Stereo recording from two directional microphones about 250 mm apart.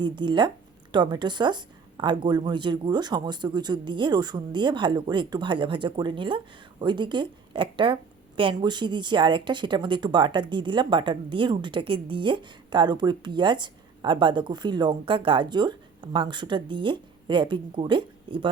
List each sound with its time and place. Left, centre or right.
0.0 s a woman's voice: centre